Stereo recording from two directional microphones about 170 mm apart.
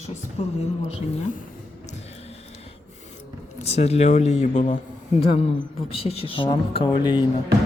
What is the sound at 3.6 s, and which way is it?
Speech, 40° left (ahead or behind).